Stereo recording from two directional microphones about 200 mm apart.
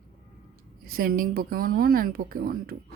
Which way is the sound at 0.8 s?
45° right (ahead or behind).